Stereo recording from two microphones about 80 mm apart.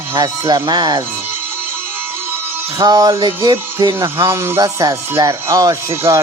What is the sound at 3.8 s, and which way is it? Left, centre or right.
Speech, right.